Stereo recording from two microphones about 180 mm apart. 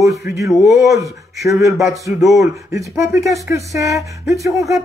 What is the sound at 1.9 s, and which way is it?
Speech, 15° right (ahead or behind).